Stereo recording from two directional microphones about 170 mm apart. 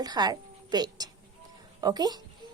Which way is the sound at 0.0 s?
25° right (ahead or behind).